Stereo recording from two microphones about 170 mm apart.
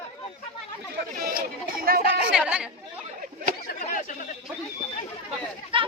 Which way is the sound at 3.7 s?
55° left (ahead or behind).